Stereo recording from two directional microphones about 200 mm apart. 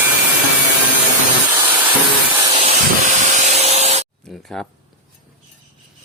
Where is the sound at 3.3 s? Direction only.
35° right (ahead or behind).